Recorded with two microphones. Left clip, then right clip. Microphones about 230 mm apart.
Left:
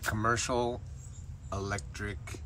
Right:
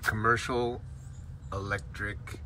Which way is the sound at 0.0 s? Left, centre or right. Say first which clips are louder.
Right 4 dB; centre.